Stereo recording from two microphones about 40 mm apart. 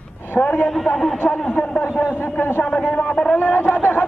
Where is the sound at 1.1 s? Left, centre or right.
Left.